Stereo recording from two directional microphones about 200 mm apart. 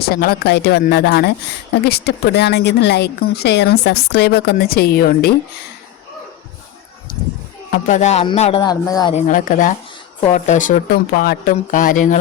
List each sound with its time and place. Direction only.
0.0 s speech: 50° left (ahead or behind)
7.7 s music: 40° left (ahead or behind); by 9.1 s 20° left (ahead or behind)
9.1 s speech: 40° left (ahead or behind)